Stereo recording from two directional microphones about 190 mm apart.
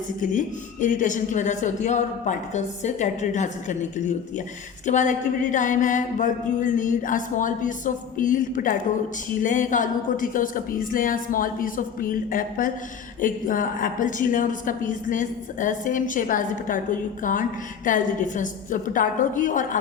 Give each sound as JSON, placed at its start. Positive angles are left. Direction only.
{"t": 0.2, "sound": "a woman's voice", "side_deg": 45}